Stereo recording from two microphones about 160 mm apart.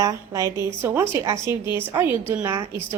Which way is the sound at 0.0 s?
20° right (ahead or behind).